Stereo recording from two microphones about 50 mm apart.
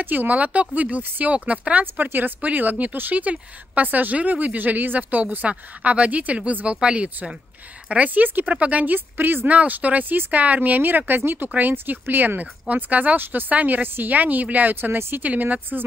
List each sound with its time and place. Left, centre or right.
0.0 s speech: right
9.5 s speech: right
13.8 s speech: right
15.2 s speech: right